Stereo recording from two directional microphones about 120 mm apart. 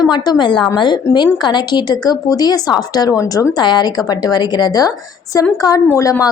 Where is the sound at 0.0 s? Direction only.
35° left (ahead or behind).